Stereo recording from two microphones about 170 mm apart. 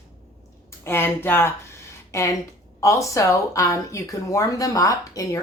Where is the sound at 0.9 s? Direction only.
10° left (ahead or behind).